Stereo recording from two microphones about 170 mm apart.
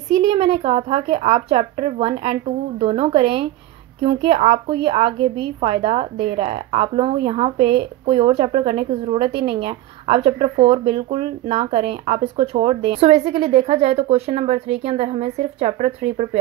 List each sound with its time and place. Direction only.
0.3 s a woman's voice: 35° right (ahead or behind)